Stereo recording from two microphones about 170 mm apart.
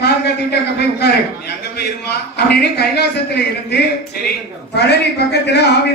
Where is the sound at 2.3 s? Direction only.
70° left (ahead or behind).